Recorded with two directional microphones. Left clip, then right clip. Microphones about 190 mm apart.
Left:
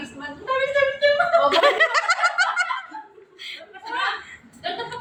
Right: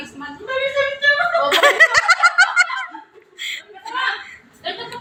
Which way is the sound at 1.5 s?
Centre (ahead or behind).